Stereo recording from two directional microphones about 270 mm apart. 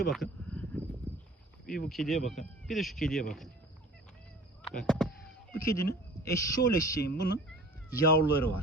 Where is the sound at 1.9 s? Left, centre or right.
Centre.